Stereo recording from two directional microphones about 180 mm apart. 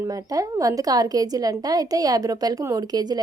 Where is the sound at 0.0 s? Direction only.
20° right (ahead or behind).